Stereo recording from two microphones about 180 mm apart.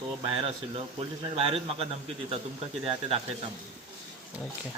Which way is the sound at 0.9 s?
30° right (ahead or behind).